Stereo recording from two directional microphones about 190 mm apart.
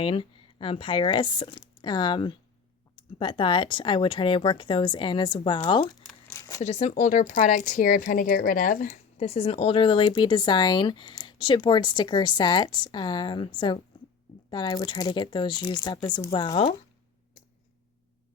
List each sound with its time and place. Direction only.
0.0 s speech: 25° left (ahead or behind)
6.6 s speech: 35° left (ahead or behind)
9.1 s speech: 30° left (ahead or behind)